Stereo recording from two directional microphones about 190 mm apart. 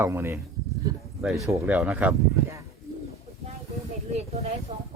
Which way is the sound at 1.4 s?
10° right (ahead or behind).